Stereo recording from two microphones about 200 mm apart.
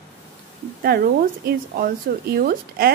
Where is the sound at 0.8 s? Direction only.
50° right (ahead or behind).